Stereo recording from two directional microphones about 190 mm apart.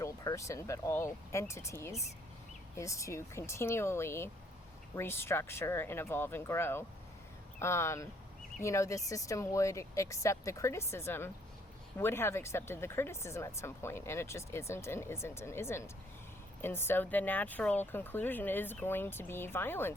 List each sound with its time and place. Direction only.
0.0 s speech: 15° left (ahead or behind)